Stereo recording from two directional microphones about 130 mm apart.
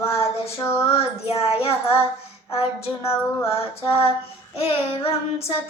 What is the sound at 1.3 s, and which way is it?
Child singing, 50° left (ahead or behind).